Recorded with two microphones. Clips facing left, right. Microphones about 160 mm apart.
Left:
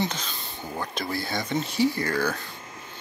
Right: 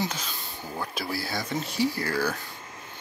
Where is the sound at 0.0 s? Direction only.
5° right (ahead or behind).